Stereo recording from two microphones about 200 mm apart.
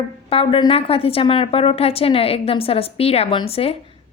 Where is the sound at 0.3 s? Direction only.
25° left (ahead or behind).